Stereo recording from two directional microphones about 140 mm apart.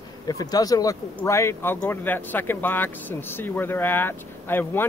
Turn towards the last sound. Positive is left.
turn(degrees=15)  # may be behind; listen again after turning